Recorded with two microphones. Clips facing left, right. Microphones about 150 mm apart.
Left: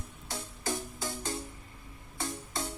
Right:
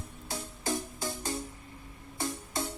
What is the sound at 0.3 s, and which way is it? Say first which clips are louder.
Music: right 2 dB; 20° right (ahead or behind).